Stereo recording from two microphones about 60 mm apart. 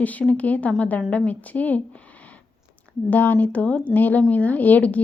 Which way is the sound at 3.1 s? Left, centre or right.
Left.